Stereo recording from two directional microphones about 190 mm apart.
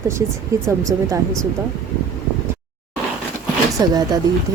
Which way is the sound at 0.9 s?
15° right (ahead or behind).